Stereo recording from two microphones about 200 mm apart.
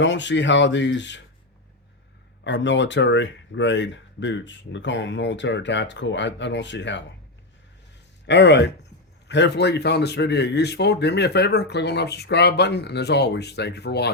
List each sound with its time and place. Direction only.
0.0 s speech: 65° left (ahead or behind)
2.4 s speech: 65° left (ahead or behind)
8.3 s speech: 60° left (ahead or behind)